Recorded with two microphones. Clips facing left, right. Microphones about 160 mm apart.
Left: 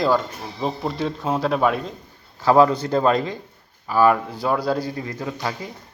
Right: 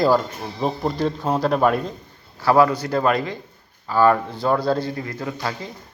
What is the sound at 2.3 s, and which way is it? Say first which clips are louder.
A man's voice: left 1 dB; 20° left (ahead or behind).